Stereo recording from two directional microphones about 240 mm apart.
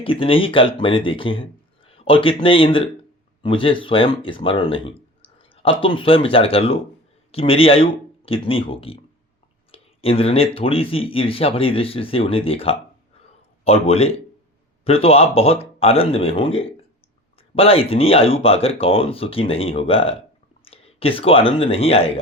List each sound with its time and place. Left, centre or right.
0.0 s speech: left